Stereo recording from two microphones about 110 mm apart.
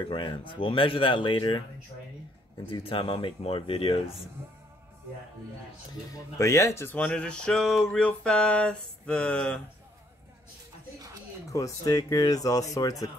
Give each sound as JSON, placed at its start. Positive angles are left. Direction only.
{"t": 0.1, "sound": "speech", "side_deg": 45}
{"t": 2.7, "sound": "speech", "side_deg": 55}
{"t": 6.3, "sound": "speech", "side_deg": 25}
{"t": 11.5, "sound": "speech", "side_deg": 35}